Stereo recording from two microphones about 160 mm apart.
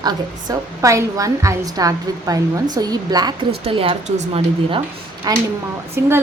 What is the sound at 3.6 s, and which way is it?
A woman's voice, 35° right (ahead or behind).